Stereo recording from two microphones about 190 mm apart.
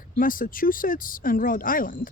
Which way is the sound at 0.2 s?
45° left (ahead or behind).